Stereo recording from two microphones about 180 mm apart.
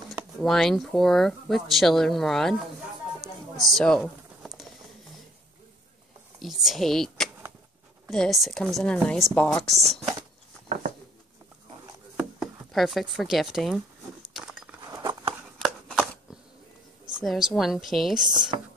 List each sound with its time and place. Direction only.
0.4 s speech: centre (ahead or behind)
3.2 s a sound: centre (ahead or behind)
6.4 s speech: centre (ahead or behind)
12.2 s speech: centre (ahead or behind)
14.3 s a sound: centre (ahead or behind)
14.9 s patter: 20° right (ahead or behind)
15.6 s a sound: centre (ahead or behind)
17.2 s speech: centre (ahead or behind)
18.2 s speech: 25° right (ahead or behind)